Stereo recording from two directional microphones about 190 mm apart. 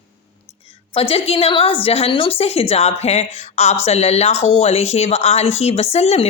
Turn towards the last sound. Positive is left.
turn(degrees=35)  # may be behind; listen again after turning